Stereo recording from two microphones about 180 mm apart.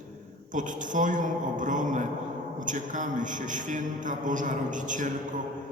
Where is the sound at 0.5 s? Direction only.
45° right (ahead or behind).